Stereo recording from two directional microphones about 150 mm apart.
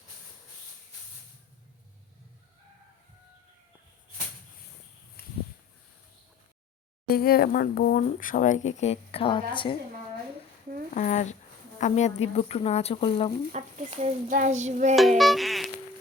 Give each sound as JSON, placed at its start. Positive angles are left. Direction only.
{"t": 7.1, "sound": "speech", "side_deg": 90}
{"t": 10.9, "sound": "speech", "side_deg": 55}
{"t": 13.5, "sound": "child singing", "side_deg": -55}
{"t": 15.2, "sound": "music", "side_deg": 0}